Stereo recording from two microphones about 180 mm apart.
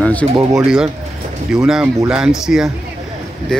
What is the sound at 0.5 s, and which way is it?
Speech, 5° right (ahead or behind).